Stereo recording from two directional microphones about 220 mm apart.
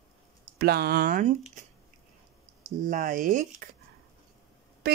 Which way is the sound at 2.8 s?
35° right (ahead or behind).